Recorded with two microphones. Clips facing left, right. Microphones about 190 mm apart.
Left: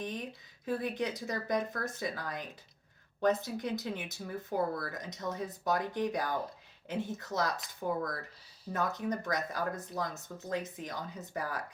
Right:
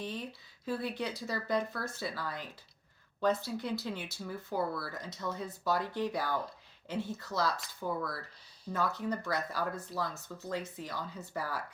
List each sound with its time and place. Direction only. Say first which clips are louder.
0.0 s speech: left 1 dB; 15° left (ahead or behind)